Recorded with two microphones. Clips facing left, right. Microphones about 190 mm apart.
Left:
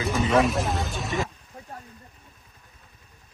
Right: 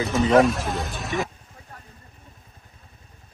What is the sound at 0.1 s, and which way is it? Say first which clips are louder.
Speech: right 4 dB; 25° right (ahead or behind).